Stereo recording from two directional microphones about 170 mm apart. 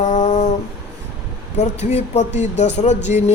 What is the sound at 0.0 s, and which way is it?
Humming, 45° left (ahead or behind).